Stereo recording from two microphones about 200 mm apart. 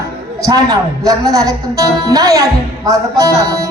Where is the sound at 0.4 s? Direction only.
15° right (ahead or behind).